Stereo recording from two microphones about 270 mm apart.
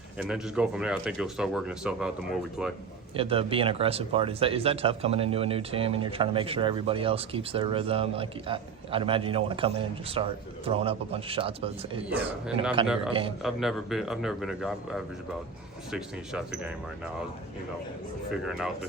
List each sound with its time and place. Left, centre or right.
0.2 s speech: centre
3.2 s a man's voice: centre
13.4 s speech: centre
18.3 s speech: centre